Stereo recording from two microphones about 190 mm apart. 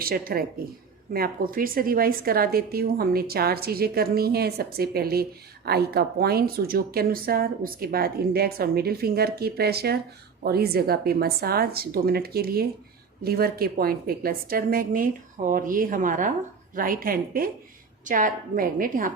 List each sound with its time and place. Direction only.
0.0 s a woman's voice: 50° right (ahead or behind)